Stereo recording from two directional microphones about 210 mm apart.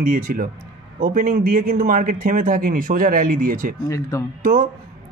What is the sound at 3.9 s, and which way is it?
Speech, 15° left (ahead or behind).